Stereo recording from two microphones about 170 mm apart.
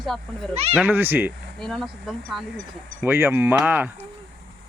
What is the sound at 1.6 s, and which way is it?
Speech, centre (ahead or behind).